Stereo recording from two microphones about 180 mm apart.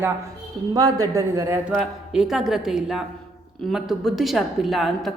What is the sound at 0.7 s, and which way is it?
A man's voice, 20° right (ahead or behind).